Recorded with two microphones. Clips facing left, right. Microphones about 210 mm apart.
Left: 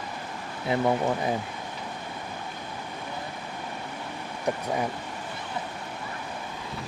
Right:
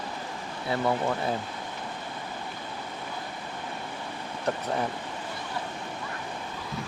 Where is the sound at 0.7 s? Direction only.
20° left (ahead or behind).